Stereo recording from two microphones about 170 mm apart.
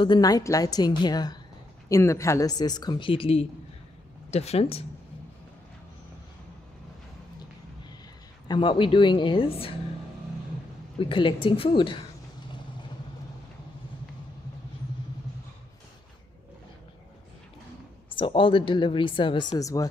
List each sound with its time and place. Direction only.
0.0 s a woman's voice: 25° left (ahead or behind)
8.5 s a woman's voice: 30° left (ahead or behind)
11.0 s a woman's voice: 30° left (ahead or behind)
18.1 s a woman's voice: 30° left (ahead or behind)